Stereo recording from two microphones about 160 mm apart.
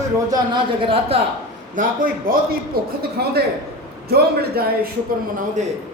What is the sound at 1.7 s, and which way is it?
Speech, 60° right (ahead or behind).